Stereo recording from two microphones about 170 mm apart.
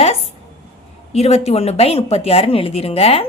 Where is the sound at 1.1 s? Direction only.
40° left (ahead or behind).